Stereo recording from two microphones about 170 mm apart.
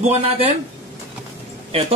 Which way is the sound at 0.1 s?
35° right (ahead or behind).